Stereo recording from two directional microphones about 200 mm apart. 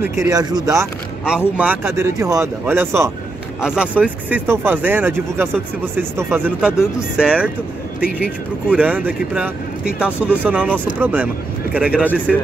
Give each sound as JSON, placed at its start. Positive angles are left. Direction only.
{"t": 0.0, "sound": "speech", "side_deg": -15}
{"t": 1.6, "sound": "speech", "side_deg": -5}
{"t": 8.7, "sound": "speech", "side_deg": -5}